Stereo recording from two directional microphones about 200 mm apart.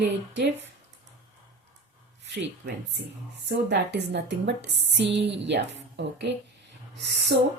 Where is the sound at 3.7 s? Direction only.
60° right (ahead or behind).